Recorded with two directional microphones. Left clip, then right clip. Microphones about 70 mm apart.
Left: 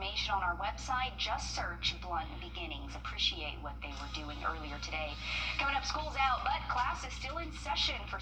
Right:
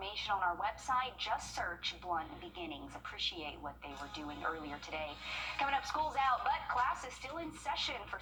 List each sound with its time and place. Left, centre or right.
0.0 s a woman's voice: right
3.2 s a woman's voice: right